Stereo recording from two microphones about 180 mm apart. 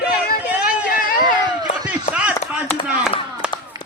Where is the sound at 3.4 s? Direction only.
5° right (ahead or behind).